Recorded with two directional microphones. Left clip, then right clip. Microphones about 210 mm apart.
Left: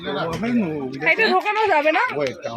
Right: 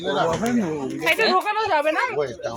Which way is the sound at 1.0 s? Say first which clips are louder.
Left 2 dB; 20° left (ahead or behind).